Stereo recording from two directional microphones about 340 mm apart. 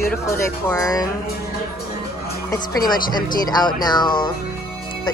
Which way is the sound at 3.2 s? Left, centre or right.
Centre.